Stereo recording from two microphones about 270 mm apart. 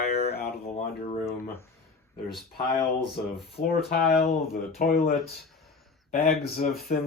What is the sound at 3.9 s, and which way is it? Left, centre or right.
Speech, left.